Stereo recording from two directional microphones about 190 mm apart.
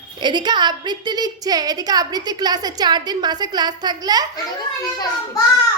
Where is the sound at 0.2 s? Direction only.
25° right (ahead or behind).